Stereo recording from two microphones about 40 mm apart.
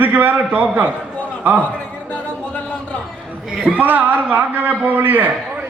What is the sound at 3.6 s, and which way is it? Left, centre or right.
A man's voice, right.